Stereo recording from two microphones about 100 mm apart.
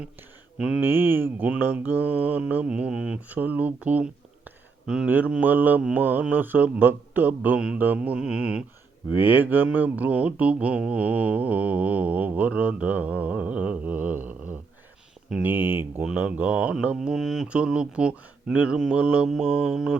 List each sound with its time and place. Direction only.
0.8 s mantra: 20° right (ahead or behind)
15.3 s speech: 15° right (ahead or behind)
16.0 s mantra: 15° right (ahead or behind)